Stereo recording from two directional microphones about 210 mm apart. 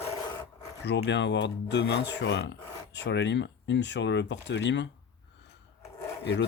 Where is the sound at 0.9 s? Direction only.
55° left (ahead or behind).